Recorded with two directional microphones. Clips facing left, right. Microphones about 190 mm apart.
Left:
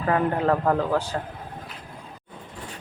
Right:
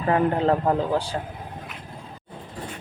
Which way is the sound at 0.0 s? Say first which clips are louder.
Right 2 dB; 25° right (ahead or behind).